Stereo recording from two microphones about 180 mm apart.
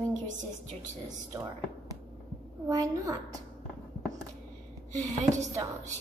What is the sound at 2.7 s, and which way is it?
Speech, 20° right (ahead or behind).